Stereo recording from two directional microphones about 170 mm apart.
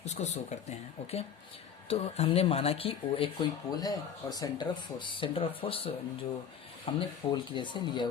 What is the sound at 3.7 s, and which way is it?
Speech, 20° left (ahead or behind).